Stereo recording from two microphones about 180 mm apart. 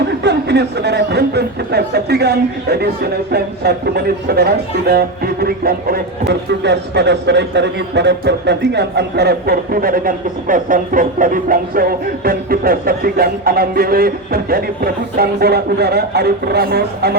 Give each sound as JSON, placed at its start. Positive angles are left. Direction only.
{"t": 0.2, "sound": "speech", "side_deg": -70}